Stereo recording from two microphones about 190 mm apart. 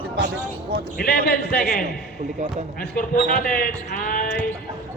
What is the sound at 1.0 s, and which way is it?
A man's voice, 50° left (ahead or behind).